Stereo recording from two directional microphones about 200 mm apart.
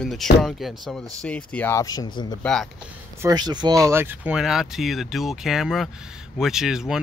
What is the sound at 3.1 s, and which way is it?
Speech, 15° right (ahead or behind).